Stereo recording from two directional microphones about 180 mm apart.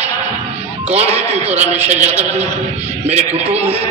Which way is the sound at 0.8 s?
35° right (ahead or behind).